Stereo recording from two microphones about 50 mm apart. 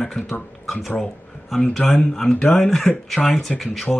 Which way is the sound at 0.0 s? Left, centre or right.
Centre.